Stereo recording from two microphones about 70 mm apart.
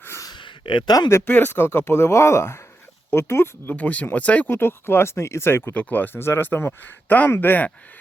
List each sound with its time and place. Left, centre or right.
0.0 s a sound: left
0.8 s speech: left
1.3 s speech: left
3.8 s speech: left
4.4 s speech: left
5.7 s speech: left